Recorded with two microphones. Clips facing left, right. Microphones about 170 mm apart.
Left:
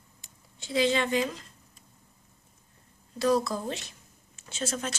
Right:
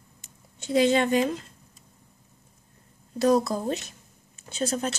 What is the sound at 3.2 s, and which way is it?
Speech, 45° right (ahead or behind).